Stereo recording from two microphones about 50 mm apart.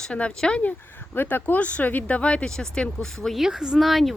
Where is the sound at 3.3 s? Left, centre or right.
Centre.